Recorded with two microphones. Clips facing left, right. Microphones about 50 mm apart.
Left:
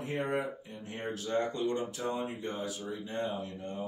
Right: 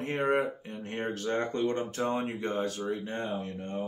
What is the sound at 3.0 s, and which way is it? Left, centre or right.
Speech, right.